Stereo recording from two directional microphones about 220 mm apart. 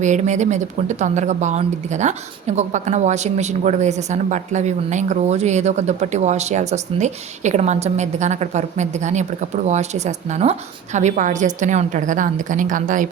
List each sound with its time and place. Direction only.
0.0 s speech: 35° right (ahead or behind)